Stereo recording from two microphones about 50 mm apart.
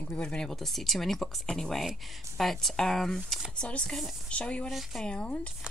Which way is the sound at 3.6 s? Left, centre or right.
Centre.